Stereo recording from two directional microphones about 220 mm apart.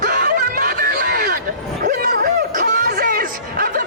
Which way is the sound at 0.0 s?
40° right (ahead or behind).